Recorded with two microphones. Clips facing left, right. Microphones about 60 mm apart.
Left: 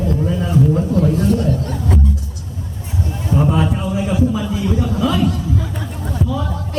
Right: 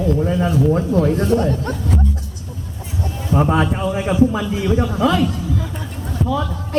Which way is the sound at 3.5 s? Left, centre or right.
Right.